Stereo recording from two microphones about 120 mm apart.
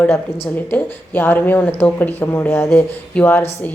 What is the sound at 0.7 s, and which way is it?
A woman's voice, 15° left (ahead or behind).